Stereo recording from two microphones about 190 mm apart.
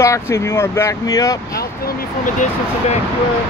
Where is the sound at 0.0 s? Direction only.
15° left (ahead or behind).